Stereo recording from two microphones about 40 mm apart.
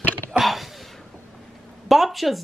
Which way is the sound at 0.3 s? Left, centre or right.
Centre.